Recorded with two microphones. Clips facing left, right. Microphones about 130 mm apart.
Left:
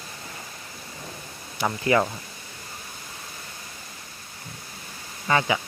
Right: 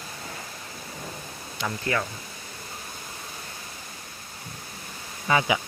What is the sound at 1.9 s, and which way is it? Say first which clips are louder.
Speech: left 7 dB; 15° left (ahead or behind).